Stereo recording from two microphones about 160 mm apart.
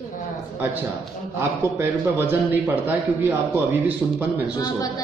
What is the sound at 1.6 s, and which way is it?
A man's voice, 15° right (ahead or behind).